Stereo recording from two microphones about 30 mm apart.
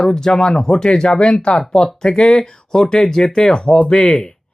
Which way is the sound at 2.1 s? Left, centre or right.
Left.